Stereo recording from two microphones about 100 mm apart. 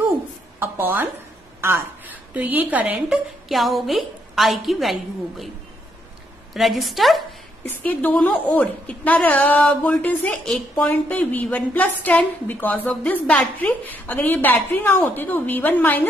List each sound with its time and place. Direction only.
0.6 s a woman's voice: 20° right (ahead or behind); by 4.9 s centre (ahead or behind)
6.5 s a woman's voice: centre (ahead or behind)
7.6 s a woman's voice: 15° left (ahead or behind)